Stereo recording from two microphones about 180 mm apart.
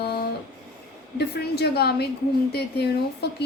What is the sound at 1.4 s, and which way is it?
A woman's voice, 65° left (ahead or behind).